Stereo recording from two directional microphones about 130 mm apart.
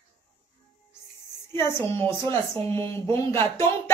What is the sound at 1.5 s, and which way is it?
A woman's voice, 20° left (ahead or behind).